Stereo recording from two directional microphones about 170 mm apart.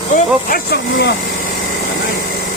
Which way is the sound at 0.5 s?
70° left (ahead or behind).